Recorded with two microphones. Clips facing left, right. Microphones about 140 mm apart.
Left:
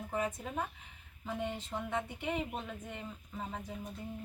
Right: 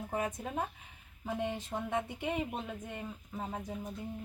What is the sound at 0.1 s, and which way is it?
Speech, 15° right (ahead or behind).